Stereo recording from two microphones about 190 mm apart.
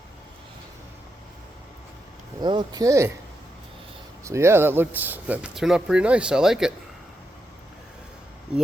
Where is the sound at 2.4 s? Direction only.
25° right (ahead or behind).